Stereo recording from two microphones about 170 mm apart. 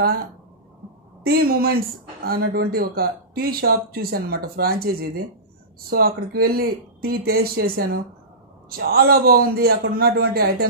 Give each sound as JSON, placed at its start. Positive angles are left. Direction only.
{"t": 1.2, "sound": "speech", "side_deg": -65}
{"t": 5.9, "sound": "speech", "side_deg": -60}